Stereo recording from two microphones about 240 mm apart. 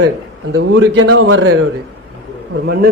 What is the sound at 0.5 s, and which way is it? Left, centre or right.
A man's voice, right.